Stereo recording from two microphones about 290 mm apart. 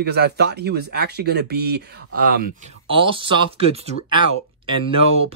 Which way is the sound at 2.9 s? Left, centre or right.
Centre.